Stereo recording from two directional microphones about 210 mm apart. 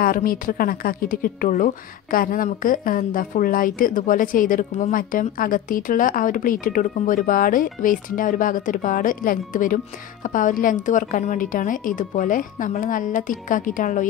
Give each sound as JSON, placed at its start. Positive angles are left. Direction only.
{"t": 0.0, "sound": "a woman's voice", "side_deg": 40}